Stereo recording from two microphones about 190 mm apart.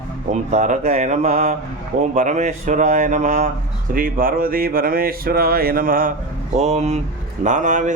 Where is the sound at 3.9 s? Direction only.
50° right (ahead or behind).